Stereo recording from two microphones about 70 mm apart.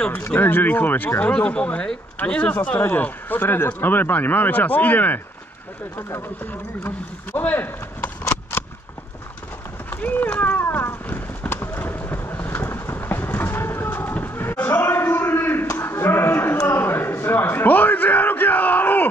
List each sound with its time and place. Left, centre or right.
0.3 s speech: left
1.3 s speech: centre
7.4 s a sound: left
9.8 s run: left
12.4 s train: left
15.6 s a sound: left
16.6 s a man's voice: left